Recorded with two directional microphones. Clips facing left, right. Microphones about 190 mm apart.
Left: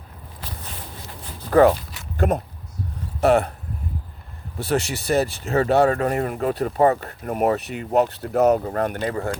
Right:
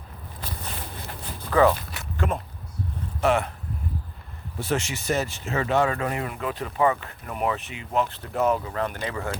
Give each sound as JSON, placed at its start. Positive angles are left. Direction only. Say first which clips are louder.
{"t": 0.8, "sound": "a sound", "louder": "right 1 dB", "side_deg": -60}
{"t": 1.5, "sound": "speech", "louder": "left 5 dB", "side_deg": 50}
{"t": 4.6, "sound": "speech", "louder": "left 4 dB", "side_deg": 35}